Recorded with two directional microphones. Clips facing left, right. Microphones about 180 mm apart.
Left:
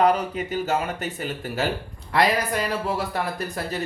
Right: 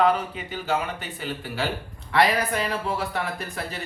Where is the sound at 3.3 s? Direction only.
40° left (ahead or behind).